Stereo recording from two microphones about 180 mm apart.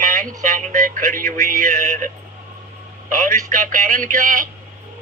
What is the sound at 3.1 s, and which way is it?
A man's voice, 45° right (ahead or behind).